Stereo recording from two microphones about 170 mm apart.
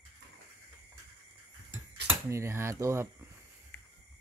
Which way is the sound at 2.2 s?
15° right (ahead or behind).